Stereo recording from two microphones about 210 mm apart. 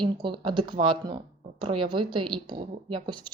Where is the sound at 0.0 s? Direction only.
20° right (ahead or behind).